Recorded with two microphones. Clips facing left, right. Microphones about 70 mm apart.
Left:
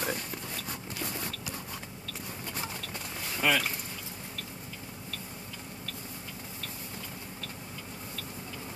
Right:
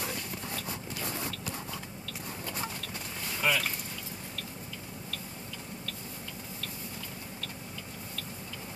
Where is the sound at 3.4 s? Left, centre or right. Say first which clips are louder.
Left 2 dB; left.